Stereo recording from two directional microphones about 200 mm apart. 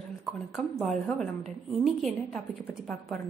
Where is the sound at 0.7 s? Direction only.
Centre (ahead or behind).